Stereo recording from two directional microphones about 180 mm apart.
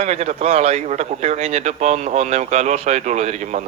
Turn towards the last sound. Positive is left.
turn(degrees=-40)  # may be behind; listen again after turning